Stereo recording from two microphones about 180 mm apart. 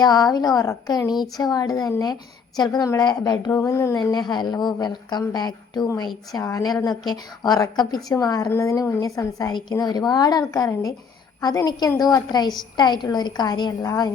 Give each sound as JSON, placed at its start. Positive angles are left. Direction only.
{"t": 0.0, "sound": "a woman's voice", "side_deg": 20}